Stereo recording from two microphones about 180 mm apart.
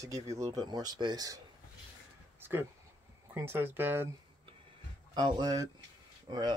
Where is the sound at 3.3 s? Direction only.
10° right (ahead or behind).